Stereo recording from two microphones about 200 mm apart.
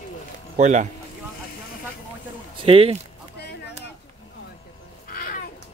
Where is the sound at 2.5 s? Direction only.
30° right (ahead or behind).